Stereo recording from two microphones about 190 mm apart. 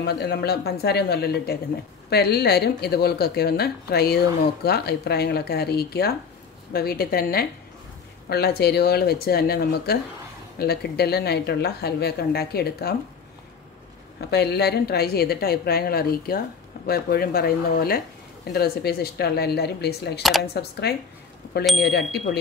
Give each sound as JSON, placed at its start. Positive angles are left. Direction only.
{"t": 0.0, "sound": "speech", "side_deg": 60}
{"t": 14.3, "sound": "speech", "side_deg": 60}
{"t": 20.2, "sound": "speech", "side_deg": 0}
{"t": 20.9, "sound": "speech", "side_deg": 55}